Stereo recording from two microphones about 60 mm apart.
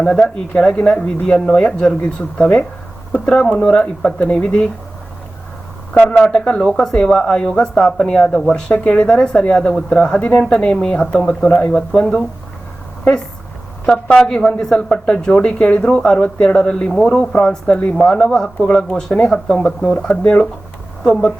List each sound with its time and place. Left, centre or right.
0.0 s speech: centre
6.1 s speech: centre
14.8 s speech: centre
17.9 s speech: centre
21.0 s speech: centre